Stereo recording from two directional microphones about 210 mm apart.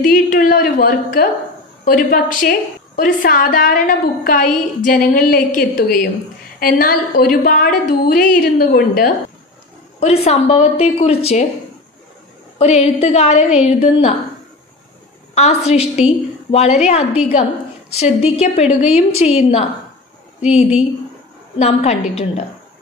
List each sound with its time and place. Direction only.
0.0 s a woman's voice: 40° left (ahead or behind)
9.9 s a woman's voice: 30° left (ahead or behind)
12.5 s a woman's voice: 30° left (ahead or behind)
15.3 s a woman's voice: 30° left (ahead or behind)